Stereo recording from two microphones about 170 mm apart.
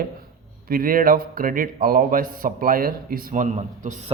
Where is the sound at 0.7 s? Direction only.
55° right (ahead or behind).